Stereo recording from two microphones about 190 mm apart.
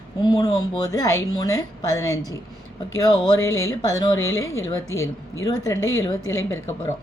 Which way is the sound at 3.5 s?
15° left (ahead or behind).